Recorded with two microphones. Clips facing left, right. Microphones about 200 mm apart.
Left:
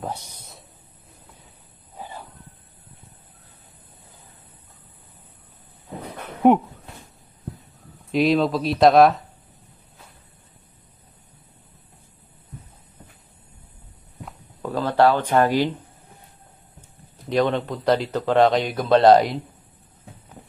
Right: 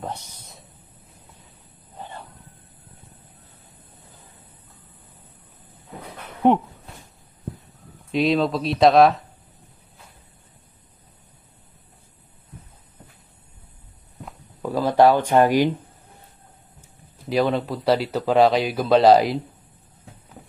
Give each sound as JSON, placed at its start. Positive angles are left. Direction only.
{"t": 0.0, "sound": "speech", "side_deg": 10}
{"t": 2.0, "sound": "a sound", "side_deg": 5}
{"t": 8.1, "sound": "speech", "side_deg": 0}
{"t": 14.7, "sound": "speech", "side_deg": -15}
{"t": 17.2, "sound": "speech", "side_deg": -5}